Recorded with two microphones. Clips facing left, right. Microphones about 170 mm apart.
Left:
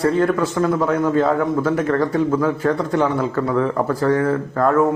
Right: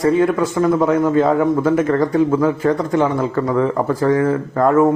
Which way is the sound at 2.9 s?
Centre (ahead or behind).